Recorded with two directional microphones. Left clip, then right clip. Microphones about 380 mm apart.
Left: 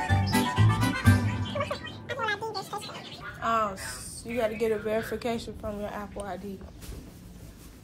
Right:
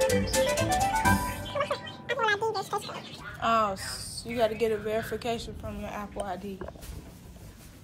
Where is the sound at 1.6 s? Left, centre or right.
Centre.